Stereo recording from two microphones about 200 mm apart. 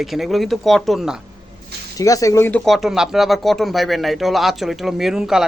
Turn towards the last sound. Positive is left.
turn(degrees=0)  # may be behind; listen again after turning